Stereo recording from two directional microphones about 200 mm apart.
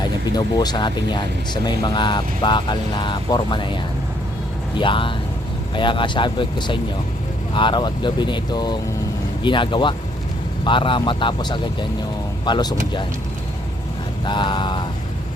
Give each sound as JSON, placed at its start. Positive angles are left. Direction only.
{"t": 0.0, "sound": "speech", "side_deg": 20}
{"t": 4.8, "sound": "speech", "side_deg": 25}
{"t": 14.3, "sound": "speech", "side_deg": 25}